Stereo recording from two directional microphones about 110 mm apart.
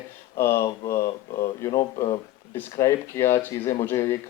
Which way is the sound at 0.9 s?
45° left (ahead or behind).